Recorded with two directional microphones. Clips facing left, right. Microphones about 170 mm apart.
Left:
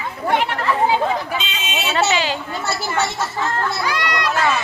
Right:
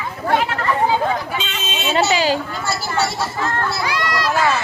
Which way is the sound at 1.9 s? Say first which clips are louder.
Right 3 dB; 35° right (ahead or behind).